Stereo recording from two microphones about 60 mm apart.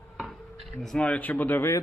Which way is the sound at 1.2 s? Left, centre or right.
Left.